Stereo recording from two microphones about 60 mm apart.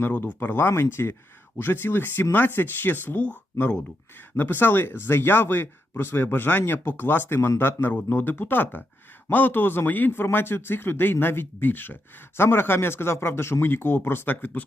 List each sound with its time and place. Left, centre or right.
0.3 s speech: left
3.2 s speech: left
4.4 s speech: left